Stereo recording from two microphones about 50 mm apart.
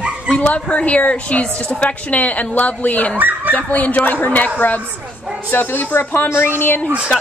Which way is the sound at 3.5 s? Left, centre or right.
Left.